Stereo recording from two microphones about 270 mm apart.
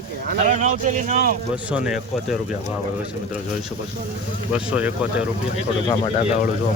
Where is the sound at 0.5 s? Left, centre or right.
Right.